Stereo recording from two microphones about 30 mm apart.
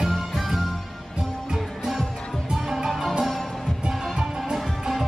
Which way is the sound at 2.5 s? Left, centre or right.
Centre.